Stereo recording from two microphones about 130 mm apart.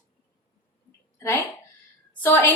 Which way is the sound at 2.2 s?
15° left (ahead or behind).